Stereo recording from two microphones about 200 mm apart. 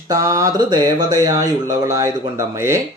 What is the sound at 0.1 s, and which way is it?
Speech, 15° right (ahead or behind).